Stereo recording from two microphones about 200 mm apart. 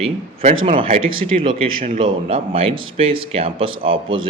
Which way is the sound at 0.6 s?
25° right (ahead or behind).